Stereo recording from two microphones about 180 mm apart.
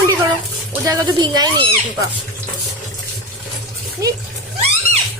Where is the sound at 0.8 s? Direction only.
20° right (ahead or behind).